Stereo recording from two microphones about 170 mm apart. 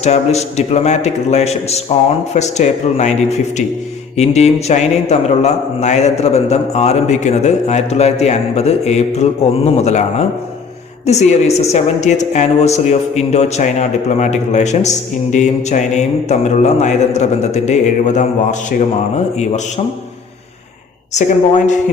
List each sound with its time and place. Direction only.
0.0 s a man's voice: 40° left (ahead or behind)
21.1 s a man's voice: 45° left (ahead or behind)